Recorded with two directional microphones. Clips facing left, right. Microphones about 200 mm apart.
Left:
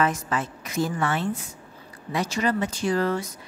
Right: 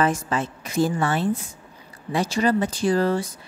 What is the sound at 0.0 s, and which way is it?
A woman's voice, 30° right (ahead or behind).